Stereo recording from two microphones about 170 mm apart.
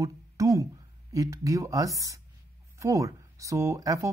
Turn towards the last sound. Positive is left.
turn(degrees=-20)  # may be behind; listen again after turning